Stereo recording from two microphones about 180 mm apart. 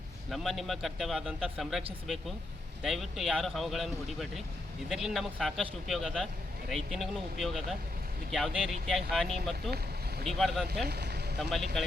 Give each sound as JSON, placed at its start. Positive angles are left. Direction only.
{"t": 0.3, "sound": "speech", "side_deg": 0}
{"t": 10.8, "sound": "vehicle", "side_deg": -65}
{"t": 11.3, "sound": "speech", "side_deg": 0}